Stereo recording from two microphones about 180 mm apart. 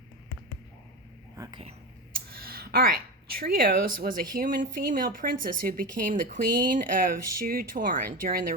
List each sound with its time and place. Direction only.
1.4 s speech: 25° right (ahead or behind)
2.3 s speech: 55° right (ahead or behind)